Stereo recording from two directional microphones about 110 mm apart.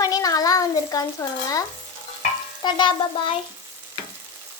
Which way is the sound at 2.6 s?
45° left (ahead or behind).